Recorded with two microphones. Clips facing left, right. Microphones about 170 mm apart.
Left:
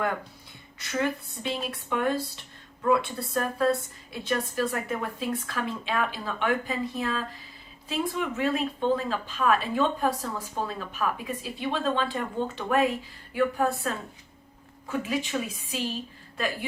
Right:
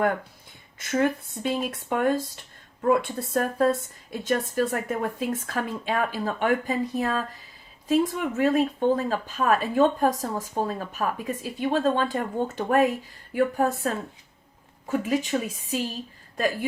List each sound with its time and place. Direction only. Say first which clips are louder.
0.8 s speech: right 5 dB; 45° right (ahead or behind)